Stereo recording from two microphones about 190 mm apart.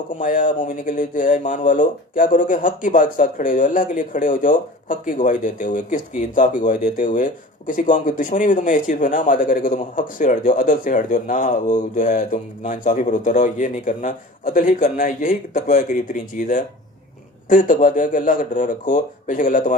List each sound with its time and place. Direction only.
0.2 s speech: 45° left (ahead or behind)